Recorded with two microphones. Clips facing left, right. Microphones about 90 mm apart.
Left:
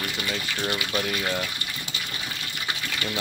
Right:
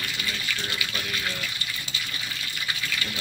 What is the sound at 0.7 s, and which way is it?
Speech, 60° left (ahead or behind).